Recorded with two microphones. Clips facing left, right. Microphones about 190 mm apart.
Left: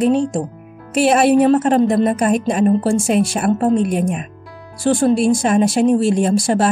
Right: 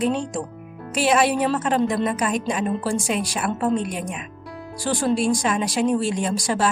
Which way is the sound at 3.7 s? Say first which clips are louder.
Left 7 dB; 55° left (ahead or behind).